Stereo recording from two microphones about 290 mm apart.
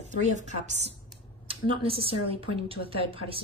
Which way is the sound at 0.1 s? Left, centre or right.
Right.